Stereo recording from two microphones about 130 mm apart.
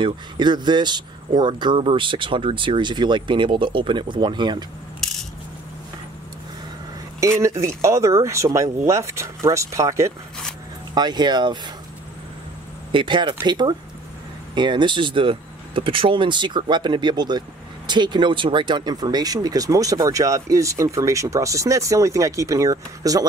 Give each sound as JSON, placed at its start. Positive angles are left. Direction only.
{"t": 0.0, "sound": "speech", "side_deg": -35}
{"t": 7.2, "sound": "speech", "side_deg": -25}
{"t": 12.9, "sound": "speech", "side_deg": -40}